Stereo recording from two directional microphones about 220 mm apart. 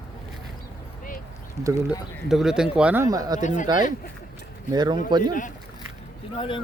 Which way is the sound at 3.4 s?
35° left (ahead or behind).